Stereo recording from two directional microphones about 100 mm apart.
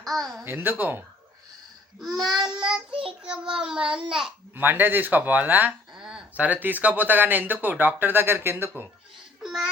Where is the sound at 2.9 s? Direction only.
65° right (ahead or behind).